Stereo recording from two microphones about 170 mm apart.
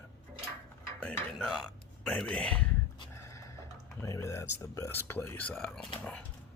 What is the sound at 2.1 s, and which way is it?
Speech, 5° left (ahead or behind).